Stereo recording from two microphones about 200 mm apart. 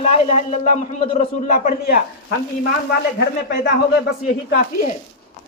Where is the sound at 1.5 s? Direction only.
50° left (ahead or behind).